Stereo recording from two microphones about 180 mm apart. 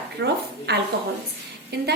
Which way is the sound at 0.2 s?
65° right (ahead or behind).